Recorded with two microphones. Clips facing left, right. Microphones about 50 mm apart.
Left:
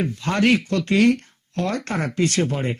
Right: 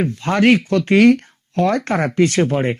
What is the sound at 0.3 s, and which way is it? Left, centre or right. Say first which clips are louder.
Speech: right 5 dB; right.